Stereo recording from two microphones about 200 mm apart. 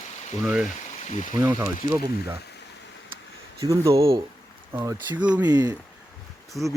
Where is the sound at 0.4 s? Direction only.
5° right (ahead or behind).